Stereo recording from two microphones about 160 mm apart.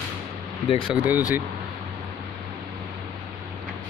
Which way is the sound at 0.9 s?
10° right (ahead or behind).